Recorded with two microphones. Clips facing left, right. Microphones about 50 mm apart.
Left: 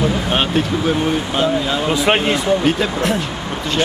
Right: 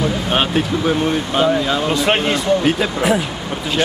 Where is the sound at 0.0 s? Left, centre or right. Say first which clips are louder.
Even; centre.